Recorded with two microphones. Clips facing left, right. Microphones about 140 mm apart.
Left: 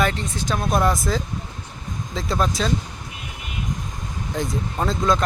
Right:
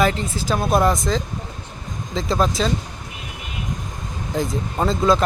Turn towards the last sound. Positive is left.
turn(degrees=-5)  # may be behind; listen again after turning